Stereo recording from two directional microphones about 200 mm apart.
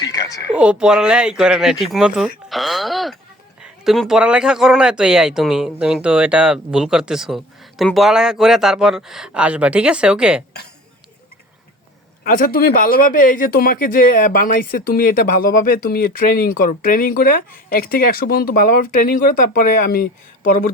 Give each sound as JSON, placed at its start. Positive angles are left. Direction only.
{"t": 0.0, "sound": "a sound", "side_deg": 20}
{"t": 0.5, "sound": "speech", "side_deg": -5}
{"t": 12.2, "sound": "speech", "side_deg": 45}